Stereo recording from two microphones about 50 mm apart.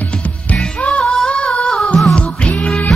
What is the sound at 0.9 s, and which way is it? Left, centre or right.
Female singing, centre.